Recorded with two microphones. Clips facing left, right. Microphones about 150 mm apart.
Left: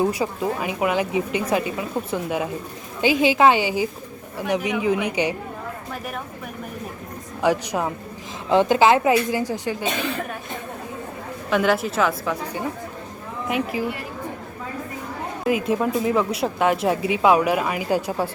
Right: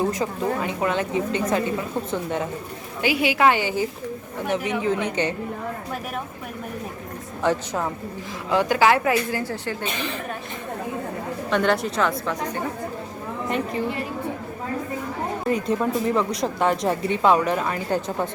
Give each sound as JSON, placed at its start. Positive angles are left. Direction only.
{"t": 0.1, "sound": "speech", "side_deg": 10}
{"t": 3.0, "sound": "a woman's voice", "side_deg": 20}
{"t": 7.4, "sound": "speech", "side_deg": 15}
{"t": 8.4, "sound": "a woman's voice", "side_deg": 25}
{"t": 11.5, "sound": "speech", "side_deg": 5}
{"t": 13.5, "sound": "speech", "side_deg": 5}
{"t": 15.4, "sound": "speech", "side_deg": 5}